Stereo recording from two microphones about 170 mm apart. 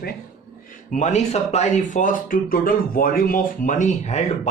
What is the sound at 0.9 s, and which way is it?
Speech, 45° left (ahead or behind).